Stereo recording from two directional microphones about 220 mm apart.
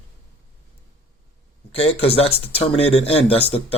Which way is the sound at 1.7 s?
25° left (ahead or behind).